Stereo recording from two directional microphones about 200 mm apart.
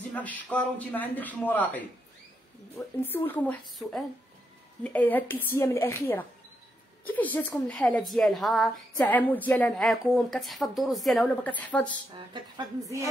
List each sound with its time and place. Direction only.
0.1 s a man's voice: 5° left (ahead or behind)
3.0 s a man's voice: 10° left (ahead or behind)
12.5 s a woman's voice: 15° right (ahead or behind)